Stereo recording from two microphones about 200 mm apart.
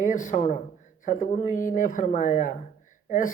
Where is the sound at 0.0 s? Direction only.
40° left (ahead or behind).